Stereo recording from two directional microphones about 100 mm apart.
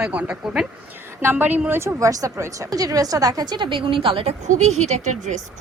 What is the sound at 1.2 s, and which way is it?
A woman's voice, 20° right (ahead or behind).